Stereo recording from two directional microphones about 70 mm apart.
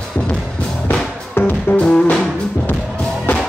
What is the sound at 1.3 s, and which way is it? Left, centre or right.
Music, left.